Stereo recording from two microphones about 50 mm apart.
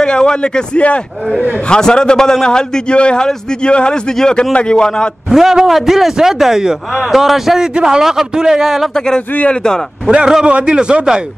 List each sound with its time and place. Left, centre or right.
0.0 s a man's voice: centre
5.3 s a man's voice: centre
8.9 s a man's voice: centre
9.3 s speech: left
10.0 s a man's voice: centre